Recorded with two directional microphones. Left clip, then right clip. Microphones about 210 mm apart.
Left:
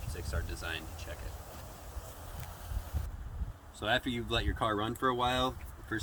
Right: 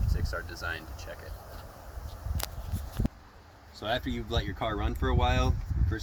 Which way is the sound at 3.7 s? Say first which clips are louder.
Even; 15° right (ahead or behind).